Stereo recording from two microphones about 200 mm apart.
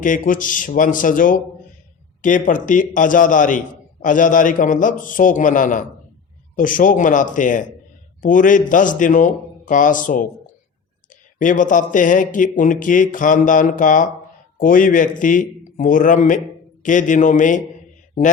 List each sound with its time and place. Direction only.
0.0 s speech: 40° left (ahead or behind)
11.3 s speech: 40° left (ahead or behind)